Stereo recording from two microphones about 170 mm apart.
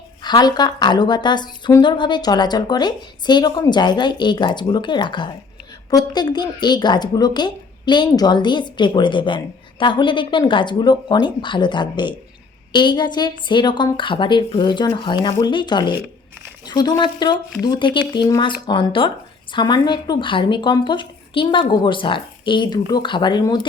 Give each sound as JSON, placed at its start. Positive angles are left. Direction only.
{"t": 0.2, "sound": "a woman's voice", "side_deg": 25}